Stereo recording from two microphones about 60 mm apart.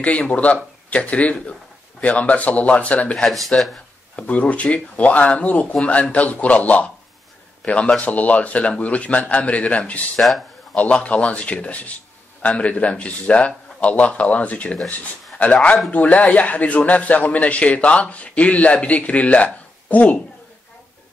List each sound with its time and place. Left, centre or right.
0.0 s a man's voice: left
3.2 s speech: centre
4.2 s a man's voice: left
15.9 s a man's voice: left